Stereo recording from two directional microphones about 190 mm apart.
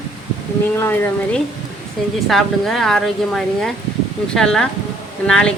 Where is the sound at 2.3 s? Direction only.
Centre (ahead or behind).